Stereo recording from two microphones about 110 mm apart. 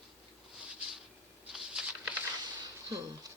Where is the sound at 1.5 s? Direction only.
5° right (ahead or behind).